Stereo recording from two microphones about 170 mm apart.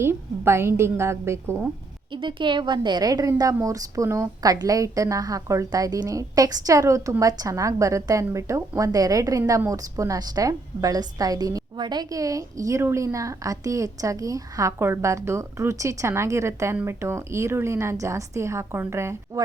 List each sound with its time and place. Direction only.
0.0 s a woman's voice: 15° right (ahead or behind)
2.2 s a woman's voice: 30° right (ahead or behind)